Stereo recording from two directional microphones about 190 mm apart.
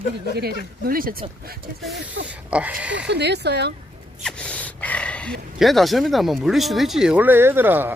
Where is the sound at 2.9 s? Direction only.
65° right (ahead or behind).